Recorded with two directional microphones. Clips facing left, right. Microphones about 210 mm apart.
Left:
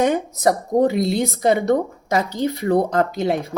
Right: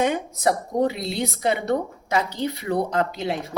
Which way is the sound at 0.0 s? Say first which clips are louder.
Left 4 dB; 45° left (ahead or behind).